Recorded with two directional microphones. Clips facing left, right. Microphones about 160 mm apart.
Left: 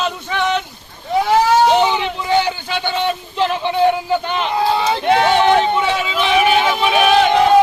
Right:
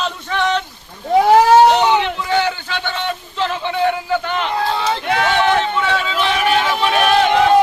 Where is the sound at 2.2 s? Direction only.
15° left (ahead or behind); by 7.3 s centre (ahead or behind).